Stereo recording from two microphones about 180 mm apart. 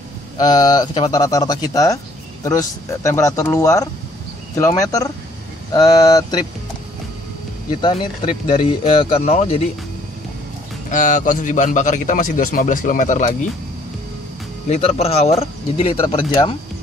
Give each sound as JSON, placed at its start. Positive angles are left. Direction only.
{"t": 0.4, "sound": "speech", "side_deg": 20}
{"t": 7.7, "sound": "speech", "side_deg": 30}
{"t": 10.9, "sound": "a man's voice", "side_deg": 45}
{"t": 14.7, "sound": "speech", "side_deg": 35}